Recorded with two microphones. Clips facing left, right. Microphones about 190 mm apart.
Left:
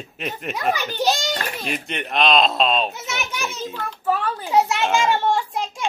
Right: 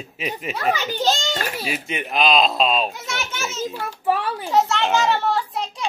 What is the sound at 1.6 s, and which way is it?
Speech, 5° right (ahead or behind).